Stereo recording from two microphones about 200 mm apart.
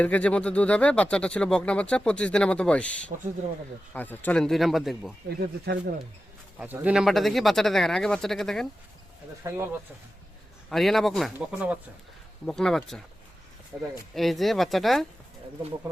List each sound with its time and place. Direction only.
0.0 s speech: 5° left (ahead or behind)
3.1 s speech: 40° right (ahead or behind)
3.9 s speech: 10° left (ahead or behind)
5.6 s speech: 55° right (ahead or behind)
6.6 s speech: 5° right (ahead or behind)
9.4 s speech: 15° right (ahead or behind)
10.7 s speech: centre (ahead or behind)
14.2 s speech: centre (ahead or behind)